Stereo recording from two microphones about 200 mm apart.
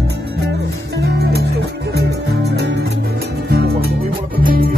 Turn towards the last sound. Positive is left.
turn(degrees=-45)  # may be behind; listen again after turning